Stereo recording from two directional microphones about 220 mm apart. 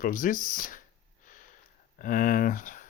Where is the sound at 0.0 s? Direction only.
40° left (ahead or behind).